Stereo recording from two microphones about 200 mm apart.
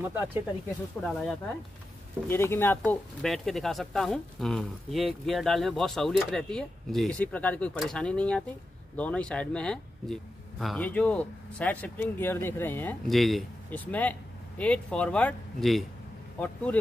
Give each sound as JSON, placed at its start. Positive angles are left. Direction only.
{"t": 0.1, "sound": "speech", "side_deg": -10}
{"t": 1.0, "sound": "speech", "side_deg": 5}